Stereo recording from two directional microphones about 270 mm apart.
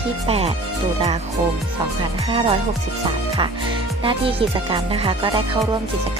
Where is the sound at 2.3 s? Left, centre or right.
Centre.